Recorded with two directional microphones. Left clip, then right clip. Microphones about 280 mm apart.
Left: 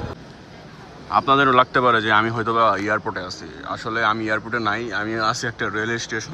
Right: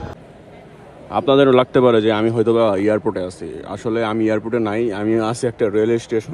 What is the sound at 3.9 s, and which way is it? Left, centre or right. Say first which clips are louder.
Speech: right 2 dB; centre.